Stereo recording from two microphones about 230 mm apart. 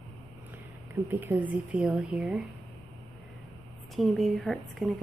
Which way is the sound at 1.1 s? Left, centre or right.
Centre.